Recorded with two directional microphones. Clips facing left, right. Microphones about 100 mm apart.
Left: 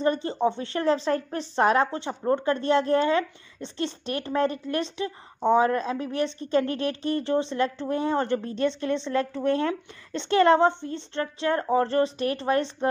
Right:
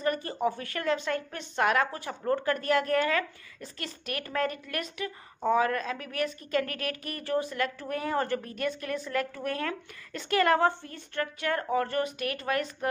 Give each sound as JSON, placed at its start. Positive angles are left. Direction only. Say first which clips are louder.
{"t": 0.0, "sound": "a woman's voice", "louder": "left 5 dB", "side_deg": 25}